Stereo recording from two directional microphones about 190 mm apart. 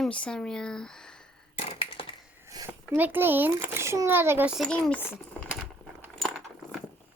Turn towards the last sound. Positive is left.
turn(degrees=0)  # may be behind; listen again after turning